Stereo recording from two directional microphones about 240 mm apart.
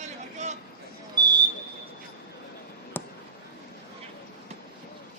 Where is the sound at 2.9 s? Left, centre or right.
Centre.